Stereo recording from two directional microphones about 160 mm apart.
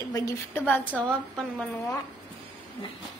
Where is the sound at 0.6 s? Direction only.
10° left (ahead or behind).